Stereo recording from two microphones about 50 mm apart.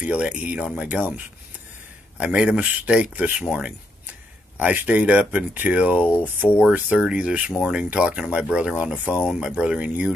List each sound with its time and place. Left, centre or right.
0.0 s speech: right
0.8 s speech: right
2.1 s speech: right
4.6 s speech: right
5.3 s speech: right
5.7 s speech: right
6.2 s speech: right
6.7 s speech: right